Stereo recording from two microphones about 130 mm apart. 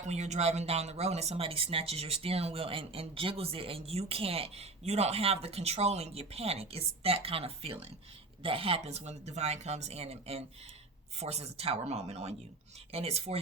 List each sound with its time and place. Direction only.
0.1 s speech: 60° right (ahead or behind)